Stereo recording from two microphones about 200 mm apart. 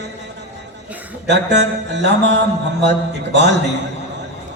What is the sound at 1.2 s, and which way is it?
Music, 60° right (ahead or behind).